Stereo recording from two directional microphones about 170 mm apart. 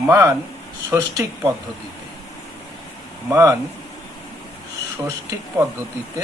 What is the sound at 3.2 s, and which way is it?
Speech, 15° right (ahead or behind).